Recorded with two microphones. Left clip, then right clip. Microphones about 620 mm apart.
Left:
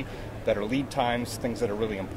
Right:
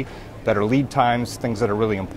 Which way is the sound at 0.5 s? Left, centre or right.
Right.